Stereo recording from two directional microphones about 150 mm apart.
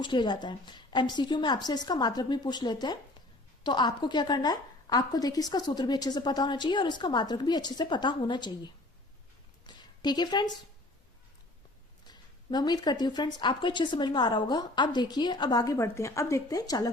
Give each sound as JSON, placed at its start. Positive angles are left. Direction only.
{"t": 0.0, "sound": "a woman's voice", "side_deg": 30}
{"t": 9.6, "sound": "a sound", "side_deg": 30}
{"t": 12.0, "sound": "a woman's voice", "side_deg": 30}